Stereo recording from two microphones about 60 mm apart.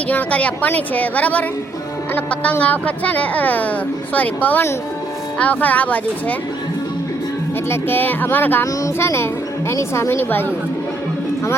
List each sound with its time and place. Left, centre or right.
0.1 s speech: left
7.7 s speech: left
9.0 s speech: left
10.2 s speech: left